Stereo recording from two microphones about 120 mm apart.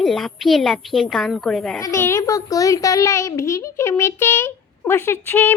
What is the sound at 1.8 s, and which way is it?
A child's voice, 25° left (ahead or behind).